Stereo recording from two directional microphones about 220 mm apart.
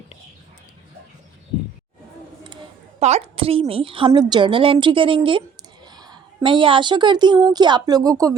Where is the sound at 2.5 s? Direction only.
30° right (ahead or behind).